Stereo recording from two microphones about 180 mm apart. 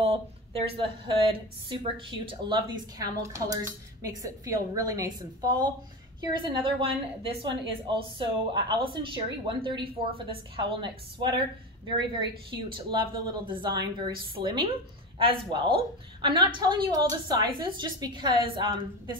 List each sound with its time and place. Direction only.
0.0 s speech: 30° right (ahead or behind)